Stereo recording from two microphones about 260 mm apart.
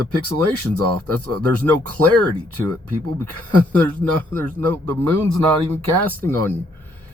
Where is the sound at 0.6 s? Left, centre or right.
Right.